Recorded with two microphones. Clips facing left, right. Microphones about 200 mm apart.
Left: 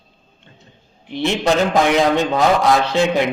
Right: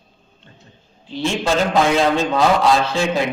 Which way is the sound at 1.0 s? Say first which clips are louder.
Left 3 dB; 20° left (ahead or behind).